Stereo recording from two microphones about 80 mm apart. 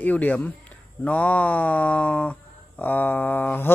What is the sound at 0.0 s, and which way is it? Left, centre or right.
Speech, left.